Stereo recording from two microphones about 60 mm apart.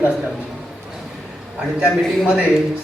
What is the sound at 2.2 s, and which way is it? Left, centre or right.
Speech, centre.